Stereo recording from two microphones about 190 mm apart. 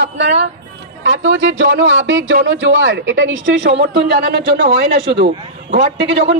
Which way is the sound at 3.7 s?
60° right (ahead or behind).